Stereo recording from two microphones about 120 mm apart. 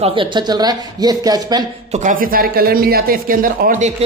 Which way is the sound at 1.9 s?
90° right.